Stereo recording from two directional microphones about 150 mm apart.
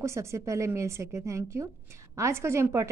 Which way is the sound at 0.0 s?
20° right (ahead or behind).